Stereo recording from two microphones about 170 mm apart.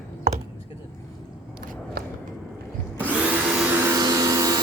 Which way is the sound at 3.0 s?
10° right (ahead or behind).